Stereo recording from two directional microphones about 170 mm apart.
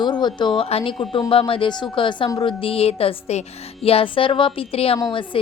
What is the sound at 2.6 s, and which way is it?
Music, 35° left (ahead or behind).